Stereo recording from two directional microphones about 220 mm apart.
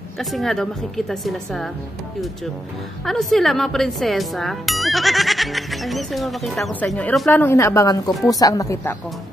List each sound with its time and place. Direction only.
0.2 s speech: centre (ahead or behind)
3.1 s speech: centre (ahead or behind)